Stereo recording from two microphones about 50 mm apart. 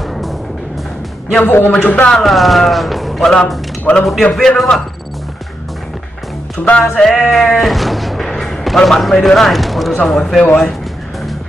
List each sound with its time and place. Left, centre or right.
1.4 s speech: left
2.0 s a man's voice: centre
3.9 s speech: left
4.2 s a man's voice: centre
6.8 s a man's voice: centre
7.2 s sheep: centre
8.3 s a man's voice: centre